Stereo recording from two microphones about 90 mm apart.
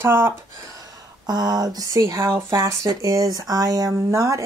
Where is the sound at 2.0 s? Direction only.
35° right (ahead or behind).